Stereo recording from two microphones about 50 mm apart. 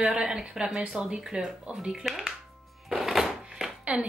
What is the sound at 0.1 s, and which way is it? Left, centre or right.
Speech, centre.